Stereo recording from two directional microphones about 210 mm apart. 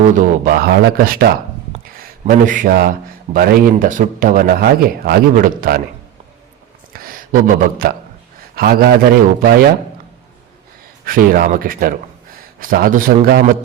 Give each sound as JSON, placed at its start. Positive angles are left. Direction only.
{"t": 0.0, "sound": "speech", "side_deg": -40}
{"t": 1.7, "sound": "a sound", "side_deg": -40}
{"t": 3.3, "sound": "speech", "side_deg": -40}
{"t": 6.9, "sound": "speech", "side_deg": -45}
{"t": 11.0, "sound": "speech", "side_deg": -40}